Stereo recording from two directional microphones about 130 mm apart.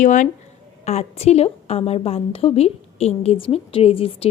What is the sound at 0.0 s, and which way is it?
Speech, 75° left (ahead or behind).